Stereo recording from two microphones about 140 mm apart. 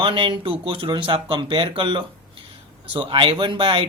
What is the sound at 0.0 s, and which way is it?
Speech, 40° right (ahead or behind).